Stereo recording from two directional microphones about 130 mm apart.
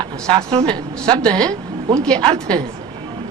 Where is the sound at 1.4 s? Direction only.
30° right (ahead or behind).